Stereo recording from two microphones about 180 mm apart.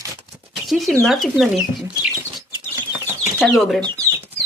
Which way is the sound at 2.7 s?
15° right (ahead or behind).